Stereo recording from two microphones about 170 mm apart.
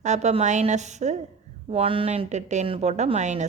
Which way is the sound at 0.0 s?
40° right (ahead or behind).